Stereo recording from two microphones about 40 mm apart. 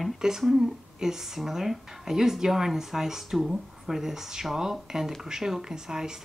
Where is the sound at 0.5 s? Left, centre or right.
Centre.